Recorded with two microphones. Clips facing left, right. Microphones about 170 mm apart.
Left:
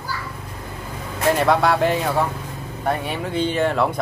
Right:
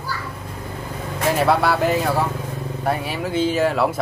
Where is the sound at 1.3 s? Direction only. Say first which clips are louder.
Left 1 dB; centre (ahead or behind).